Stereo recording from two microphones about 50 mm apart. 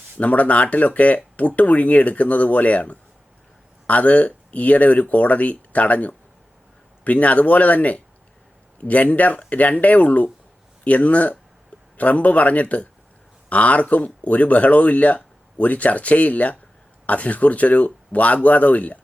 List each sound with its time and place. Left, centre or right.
0.2 s speech: left